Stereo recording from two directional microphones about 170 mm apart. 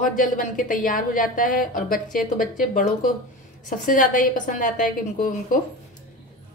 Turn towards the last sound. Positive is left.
turn(degrees=50)  # may be behind; listen again after turning